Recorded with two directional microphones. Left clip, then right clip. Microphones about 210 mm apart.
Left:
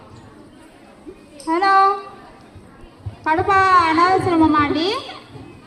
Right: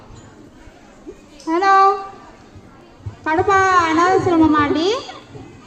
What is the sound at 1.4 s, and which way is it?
Female singing, 50° left (ahead or behind).